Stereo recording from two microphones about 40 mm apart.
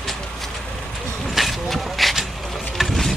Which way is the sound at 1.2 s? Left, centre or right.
Centre.